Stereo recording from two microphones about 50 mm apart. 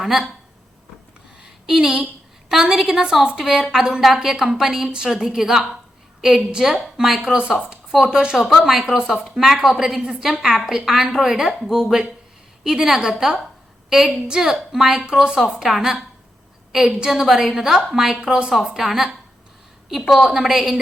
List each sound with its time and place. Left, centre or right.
0.0 s speech: centre
1.4 s a sound: centre
2.5 s a woman's voice: centre
7.2 s a woman's voice: centre
8.4 s a woman's voice: centre